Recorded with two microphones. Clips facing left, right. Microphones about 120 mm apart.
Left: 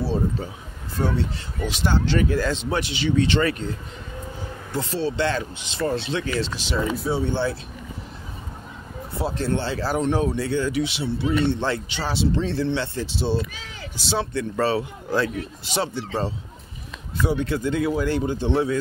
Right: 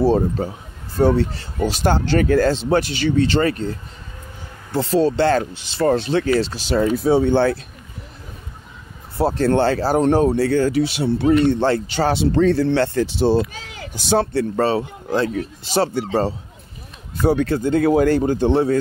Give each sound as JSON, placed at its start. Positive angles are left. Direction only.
{"t": 0.0, "sound": "speech", "side_deg": -45}
{"t": 2.4, "sound": "speech", "side_deg": -35}
{"t": 4.7, "sound": "speech", "side_deg": -40}
{"t": 6.8, "sound": "speech", "side_deg": -70}
{"t": 9.5, "sound": "speech", "side_deg": -65}
{"t": 9.8, "sound": "speech", "side_deg": -35}
{"t": 14.3, "sound": "speech", "side_deg": -35}
{"t": 17.5, "sound": "speech", "side_deg": -35}
{"t": 17.8, "sound": "speech", "side_deg": -50}
{"t": 18.5, "sound": "speech", "side_deg": -35}